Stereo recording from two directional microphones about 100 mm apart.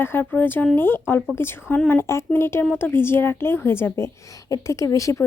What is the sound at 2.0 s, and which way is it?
A woman's voice, 25° left (ahead or behind).